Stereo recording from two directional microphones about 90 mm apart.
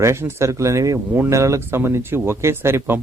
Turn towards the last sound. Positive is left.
turn(degrees=-25)  # may be behind; listen again after turning